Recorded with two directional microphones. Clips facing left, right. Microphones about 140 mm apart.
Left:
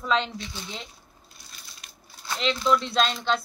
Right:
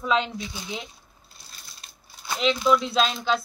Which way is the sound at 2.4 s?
5° right (ahead or behind).